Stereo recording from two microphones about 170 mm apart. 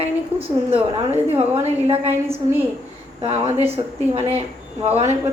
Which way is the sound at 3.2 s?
35° right (ahead or behind).